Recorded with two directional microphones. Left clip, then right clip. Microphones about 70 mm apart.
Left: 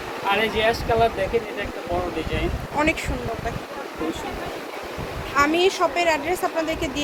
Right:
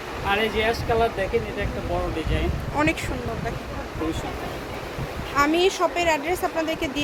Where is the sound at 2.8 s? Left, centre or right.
Right.